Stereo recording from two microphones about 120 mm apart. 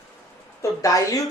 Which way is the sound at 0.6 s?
25° left (ahead or behind).